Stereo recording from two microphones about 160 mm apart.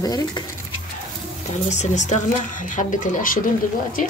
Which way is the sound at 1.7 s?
50° left (ahead or behind).